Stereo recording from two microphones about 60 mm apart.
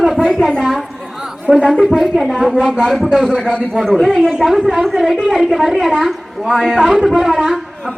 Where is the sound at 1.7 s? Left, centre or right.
Centre.